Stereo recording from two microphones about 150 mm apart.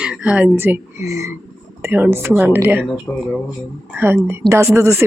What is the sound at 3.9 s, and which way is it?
A woman's voice, 15° right (ahead or behind).